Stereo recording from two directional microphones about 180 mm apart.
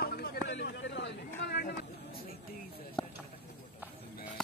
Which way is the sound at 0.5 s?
75° left (ahead or behind).